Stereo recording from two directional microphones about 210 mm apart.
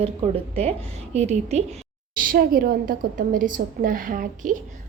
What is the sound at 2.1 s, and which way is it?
A woman's voice, 40° right (ahead or behind).